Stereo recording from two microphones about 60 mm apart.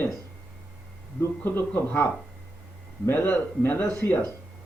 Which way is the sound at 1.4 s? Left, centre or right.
Left.